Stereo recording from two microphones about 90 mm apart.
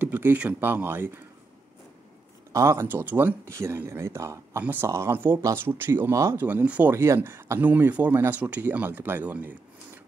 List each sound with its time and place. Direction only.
0.0 s speech: 20° right (ahead or behind)
2.5 s speech: 30° right (ahead or behind)
6.4 s speech: 15° right (ahead or behind)
6.9 s speech: 25° right (ahead or behind)